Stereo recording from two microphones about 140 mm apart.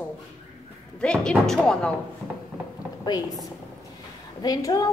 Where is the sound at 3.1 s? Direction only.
30° left (ahead or behind).